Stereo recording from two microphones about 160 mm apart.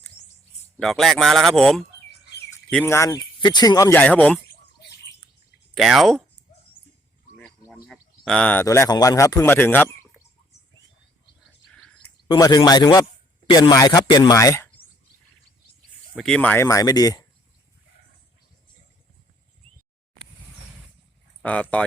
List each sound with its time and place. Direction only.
0.8 s a man's voice: centre (ahead or behind)
2.8 s speech: 20° left (ahead or behind)
4.0 s speech: 10° left (ahead or behind)
4.4 s a sound: 90° left
5.7 s a man's voice: centre (ahead or behind)
7.7 s a sound: centre (ahead or behind)
8.6 s speech: 20° left (ahead or behind)
11.7 s a sound: 5° left (ahead or behind)
12.3 s speech: 25° left (ahead or behind)
16.1 s a man's voice: 5° left (ahead or behind)
16.6 s speech: 20° left (ahead or behind)
21.4 s speech: 10° left (ahead or behind)